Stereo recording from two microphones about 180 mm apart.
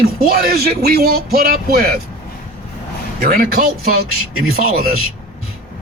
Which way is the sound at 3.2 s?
55° right (ahead or behind).